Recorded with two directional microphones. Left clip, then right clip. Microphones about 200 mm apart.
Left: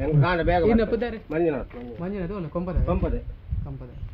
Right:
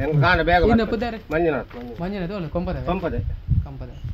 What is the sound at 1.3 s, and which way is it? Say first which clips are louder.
Speech: right 3 dB; 15° right (ahead or behind).